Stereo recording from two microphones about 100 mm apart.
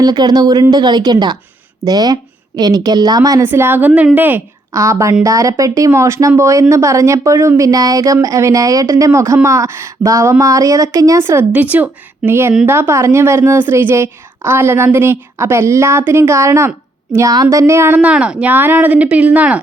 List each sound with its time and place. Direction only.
0.0 s speech: 40° right (ahead or behind)
3.4 s a woman's voice: 20° right (ahead or behind)
4.7 s a woman's voice: 30° right (ahead or behind); by 19.5 s 15° right (ahead or behind)